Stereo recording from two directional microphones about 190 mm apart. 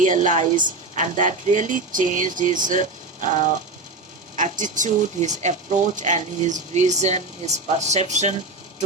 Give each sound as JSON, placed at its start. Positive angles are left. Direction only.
{"t": 0.0, "sound": "speech", "side_deg": -40}